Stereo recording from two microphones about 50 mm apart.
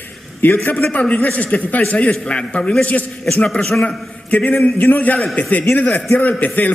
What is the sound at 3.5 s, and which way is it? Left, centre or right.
Speech, centre.